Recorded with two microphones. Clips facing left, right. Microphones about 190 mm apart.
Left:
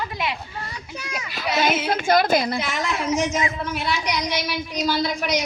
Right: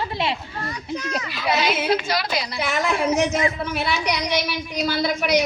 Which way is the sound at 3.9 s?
60° right (ahead or behind).